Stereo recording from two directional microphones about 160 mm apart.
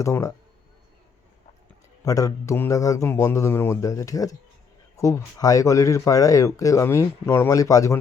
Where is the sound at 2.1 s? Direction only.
20° left (ahead or behind).